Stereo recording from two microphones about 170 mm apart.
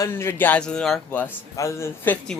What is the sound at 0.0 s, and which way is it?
A woman's voice, 15° left (ahead or behind).